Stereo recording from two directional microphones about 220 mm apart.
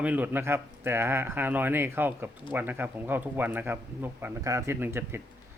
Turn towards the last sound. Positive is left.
turn(degrees=-10)  # may be behind; listen again after turning